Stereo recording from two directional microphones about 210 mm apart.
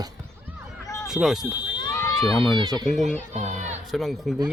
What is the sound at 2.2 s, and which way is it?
Speech, centre (ahead or behind).